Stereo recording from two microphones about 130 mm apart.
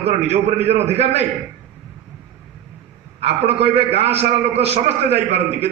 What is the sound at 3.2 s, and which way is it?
A man's voice, 50° right (ahead or behind).